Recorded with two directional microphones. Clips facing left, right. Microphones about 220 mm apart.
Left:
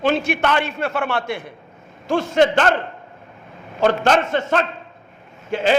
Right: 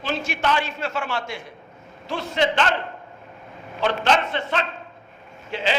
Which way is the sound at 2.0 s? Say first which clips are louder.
Left 7 dB; 45° left (ahead or behind).